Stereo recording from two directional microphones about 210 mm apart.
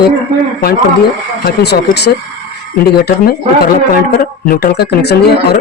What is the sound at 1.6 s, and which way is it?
Speech, 50° left (ahead or behind).